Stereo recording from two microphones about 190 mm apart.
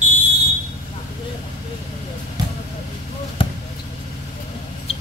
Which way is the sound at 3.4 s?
25° left (ahead or behind).